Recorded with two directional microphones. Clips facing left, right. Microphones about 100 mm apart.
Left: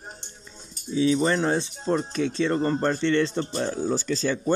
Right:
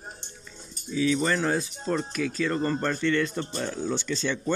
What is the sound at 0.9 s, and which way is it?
Speech, 30° left (ahead or behind).